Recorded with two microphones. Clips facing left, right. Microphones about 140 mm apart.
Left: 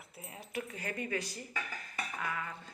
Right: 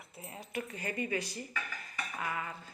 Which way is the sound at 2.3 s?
10° right (ahead or behind).